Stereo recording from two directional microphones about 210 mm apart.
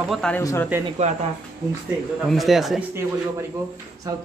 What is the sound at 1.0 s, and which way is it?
Speech, 30° right (ahead or behind).